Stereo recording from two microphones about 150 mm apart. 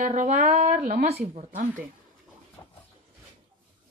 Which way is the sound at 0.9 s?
60° right (ahead or behind).